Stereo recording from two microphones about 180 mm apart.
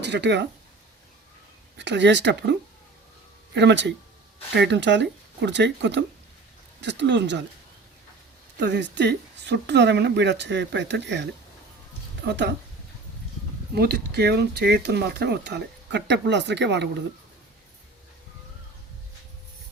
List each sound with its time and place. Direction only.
0.0 s speech: 70° right (ahead or behind)
1.8 s speech: 75° right (ahead or behind)
8.5 s speech: 75° right (ahead or behind)
13.7 s speech: 65° right (ahead or behind)